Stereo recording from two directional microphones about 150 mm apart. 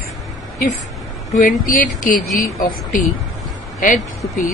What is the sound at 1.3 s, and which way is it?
Speech, 65° left (ahead or behind).